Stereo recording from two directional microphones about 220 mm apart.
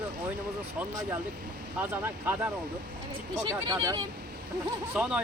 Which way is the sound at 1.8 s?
10° right (ahead or behind).